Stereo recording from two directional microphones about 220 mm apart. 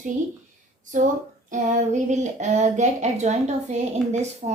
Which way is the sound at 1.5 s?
35° right (ahead or behind).